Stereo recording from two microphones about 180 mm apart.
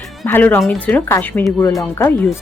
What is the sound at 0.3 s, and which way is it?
A woman's voice, 10° left (ahead or behind).